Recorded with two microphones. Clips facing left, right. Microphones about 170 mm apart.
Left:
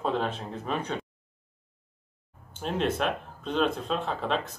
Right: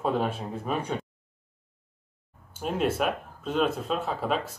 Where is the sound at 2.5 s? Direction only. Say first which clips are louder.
Right 1 dB; 5° right (ahead or behind).